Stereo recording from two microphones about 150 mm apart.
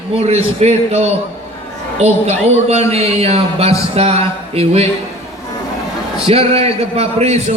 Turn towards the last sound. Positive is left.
turn(degrees=-45)  # may be behind; listen again after turning